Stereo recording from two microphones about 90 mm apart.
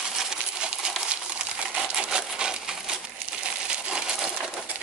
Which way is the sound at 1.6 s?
10° right (ahead or behind).